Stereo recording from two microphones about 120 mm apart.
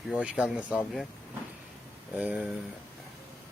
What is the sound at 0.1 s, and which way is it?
Speech, 10° right (ahead or behind).